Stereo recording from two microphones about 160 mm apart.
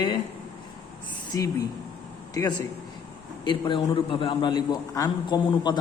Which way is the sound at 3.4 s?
30° left (ahead or behind).